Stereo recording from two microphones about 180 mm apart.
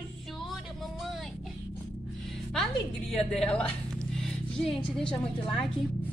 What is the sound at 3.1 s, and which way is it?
Speech, 5° left (ahead or behind).